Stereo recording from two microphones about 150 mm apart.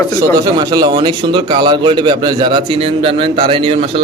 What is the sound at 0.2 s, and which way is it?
A man's voice, 25° right (ahead or behind).